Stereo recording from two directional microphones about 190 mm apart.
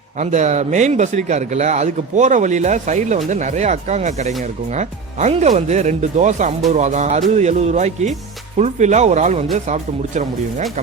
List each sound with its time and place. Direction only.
0.2 s a man's voice: 40° right (ahead or behind)